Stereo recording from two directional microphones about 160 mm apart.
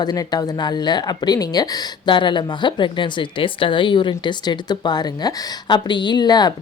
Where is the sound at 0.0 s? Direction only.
25° left (ahead or behind).